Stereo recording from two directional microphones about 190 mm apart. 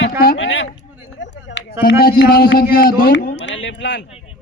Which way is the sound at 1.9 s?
50° left (ahead or behind).